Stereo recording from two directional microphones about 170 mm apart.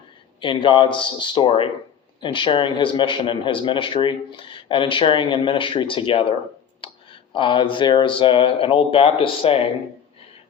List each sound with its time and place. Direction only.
0.3 s speech: 30° left (ahead or behind)